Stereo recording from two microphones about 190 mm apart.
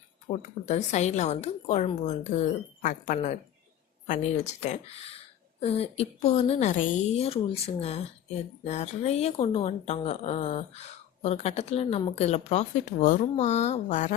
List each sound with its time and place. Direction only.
0.3 s speech: 30° left (ahead or behind)